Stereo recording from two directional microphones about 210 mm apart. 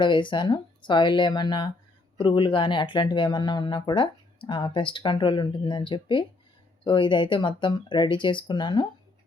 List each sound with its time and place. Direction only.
0.0 s speech: 20° left (ahead or behind)